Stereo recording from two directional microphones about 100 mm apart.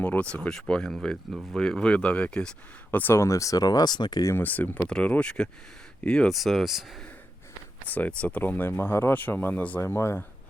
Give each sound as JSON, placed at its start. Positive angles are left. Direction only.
{"t": 0.0, "sound": "a sound", "side_deg": 15}
{"t": 0.3, "sound": "speech", "side_deg": 10}
{"t": 2.9, "sound": "speech", "side_deg": 20}
{"t": 4.2, "sound": "speech", "side_deg": 30}
{"t": 4.4, "sound": "speech", "side_deg": 15}
{"t": 7.9, "sound": "speech", "side_deg": 15}